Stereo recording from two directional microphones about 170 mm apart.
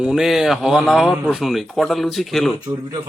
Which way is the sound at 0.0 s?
5° right (ahead or behind).